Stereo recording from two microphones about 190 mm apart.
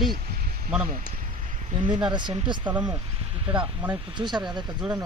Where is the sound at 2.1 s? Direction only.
25° right (ahead or behind).